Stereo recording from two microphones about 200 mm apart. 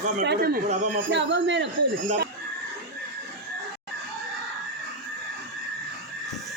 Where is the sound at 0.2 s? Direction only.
55° right (ahead or behind).